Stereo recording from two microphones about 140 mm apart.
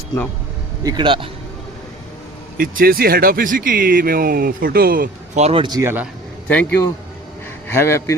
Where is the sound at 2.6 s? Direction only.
90° right.